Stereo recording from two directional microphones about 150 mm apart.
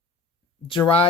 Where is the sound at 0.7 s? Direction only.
40° left (ahead or behind).